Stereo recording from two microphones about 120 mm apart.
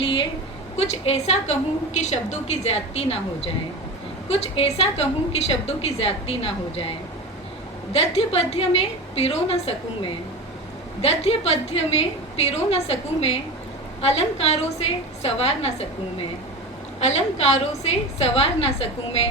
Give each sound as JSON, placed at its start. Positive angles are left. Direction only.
{"t": 0.0, "sound": "a sound", "side_deg": 45}
{"t": 0.8, "sound": "a woman's voice", "side_deg": 60}
{"t": 7.9, "sound": "a woman's voice", "side_deg": 55}
{"t": 17.0, "sound": "a woman's voice", "side_deg": 65}